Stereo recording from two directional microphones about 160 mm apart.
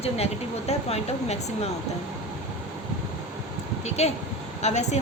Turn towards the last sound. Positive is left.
turn(degrees=45)  # may be behind; listen again after turning